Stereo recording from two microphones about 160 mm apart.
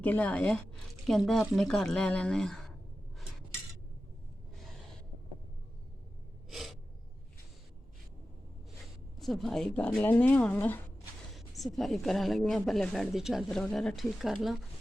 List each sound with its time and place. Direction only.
0.0 s speech: 10° left (ahead or behind)
6.5 s gasp: centre (ahead or behind)
9.1 s speech: centre (ahead or behind)
11.3 s speech: centre (ahead or behind)